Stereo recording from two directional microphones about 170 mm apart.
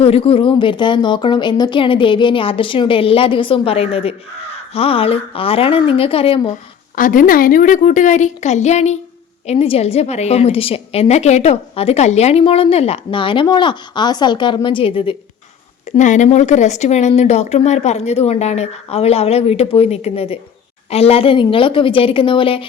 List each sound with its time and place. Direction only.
0.0 s a woman's voice: 35° left (ahead or behind)
6.9 s a woman's voice: 50° left (ahead or behind); by 15.1 s 30° left (ahead or behind)
16.0 s a woman's voice: 45° left (ahead or behind)